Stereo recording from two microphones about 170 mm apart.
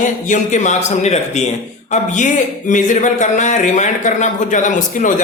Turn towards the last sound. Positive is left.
turn(degrees=45)  # may be behind; listen again after turning